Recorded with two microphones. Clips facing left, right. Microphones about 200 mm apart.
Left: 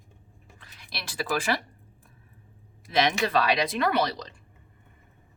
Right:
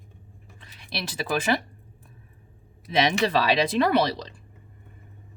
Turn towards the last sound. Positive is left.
turn(degrees=-30)  # may be behind; listen again after turning